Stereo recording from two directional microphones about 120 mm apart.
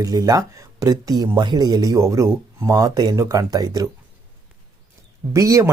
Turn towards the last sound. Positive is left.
turn(degrees=-25)  # may be behind; listen again after turning